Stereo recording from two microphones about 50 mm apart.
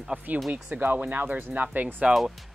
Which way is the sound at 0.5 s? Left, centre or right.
Right.